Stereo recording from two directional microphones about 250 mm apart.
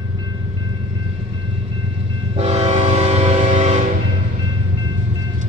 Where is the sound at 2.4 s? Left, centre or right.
Right.